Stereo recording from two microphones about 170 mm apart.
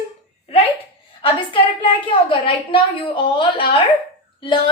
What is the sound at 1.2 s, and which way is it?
A woman's voice, 30° left (ahead or behind).